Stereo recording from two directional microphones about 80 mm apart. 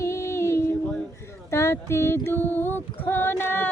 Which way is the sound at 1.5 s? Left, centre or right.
Left.